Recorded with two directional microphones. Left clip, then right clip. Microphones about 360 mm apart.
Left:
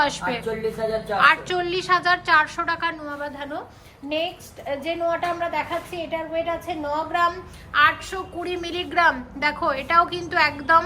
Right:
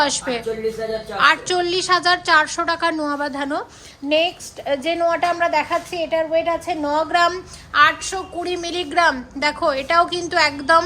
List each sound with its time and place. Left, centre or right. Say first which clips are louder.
0.0 s a woman's voice: right 3 dB; centre; by 7.3 s right
7.7 s a woman's voice: right 3 dB; centre